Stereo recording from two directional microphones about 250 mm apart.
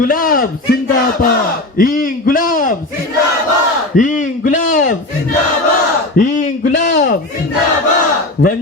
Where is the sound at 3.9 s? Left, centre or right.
Left.